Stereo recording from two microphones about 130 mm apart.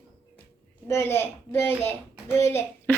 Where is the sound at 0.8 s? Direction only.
20° left (ahead or behind).